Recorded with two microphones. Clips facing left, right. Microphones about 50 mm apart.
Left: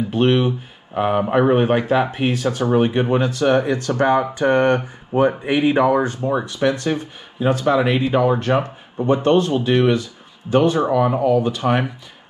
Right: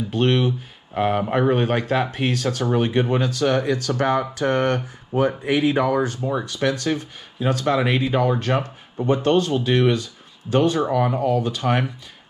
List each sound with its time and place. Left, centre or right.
0.1 s speech: centre
11.1 s speech: left
11.5 s speech: centre